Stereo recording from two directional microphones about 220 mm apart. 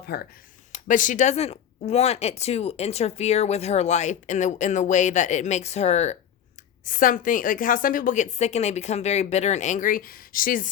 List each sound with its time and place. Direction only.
0.0 s speech: 45° left (ahead or behind)